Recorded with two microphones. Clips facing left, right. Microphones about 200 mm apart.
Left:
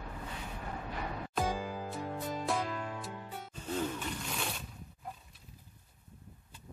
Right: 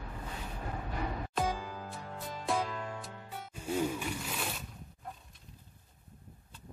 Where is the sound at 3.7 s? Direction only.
10° right (ahead or behind).